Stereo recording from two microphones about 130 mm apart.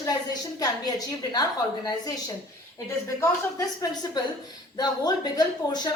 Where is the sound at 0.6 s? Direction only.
30° left (ahead or behind).